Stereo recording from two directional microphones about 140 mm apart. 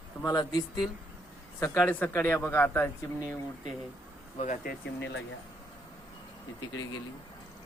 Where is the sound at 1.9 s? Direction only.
15° left (ahead or behind).